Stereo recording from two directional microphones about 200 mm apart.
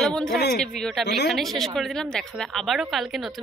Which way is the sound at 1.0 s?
60° left (ahead or behind).